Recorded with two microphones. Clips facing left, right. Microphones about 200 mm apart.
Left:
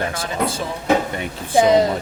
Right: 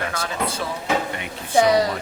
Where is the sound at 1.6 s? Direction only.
25° left (ahead or behind).